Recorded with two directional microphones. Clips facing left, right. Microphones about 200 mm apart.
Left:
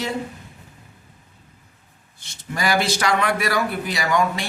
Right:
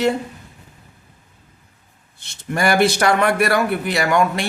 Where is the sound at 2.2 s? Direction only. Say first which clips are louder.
Right 5 dB; 60° right (ahead or behind).